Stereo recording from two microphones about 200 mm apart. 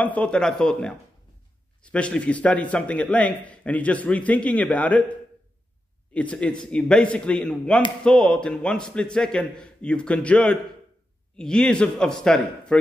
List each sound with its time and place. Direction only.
0.0 s a man's voice: 5° left (ahead or behind)
6.1 s a man's voice: 5° left (ahead or behind)